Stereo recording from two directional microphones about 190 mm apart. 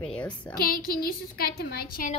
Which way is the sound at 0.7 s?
50° left (ahead or behind).